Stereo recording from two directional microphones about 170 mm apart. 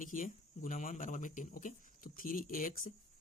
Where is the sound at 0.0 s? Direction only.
50° left (ahead or behind).